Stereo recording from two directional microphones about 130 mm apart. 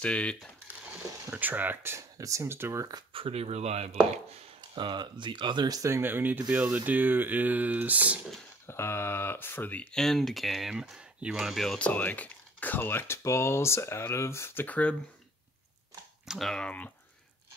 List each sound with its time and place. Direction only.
0.0 s speech: 10° left (ahead or behind)
1.3 s speech: 15° right (ahead or behind)
3.1 s speech: 45° right (ahead or behind)
4.7 s speech: 35° right (ahead or behind); by 8.2 s 10° right (ahead or behind)
8.6 s speech: 20° left (ahead or behind)
16.3 s speech: centre (ahead or behind)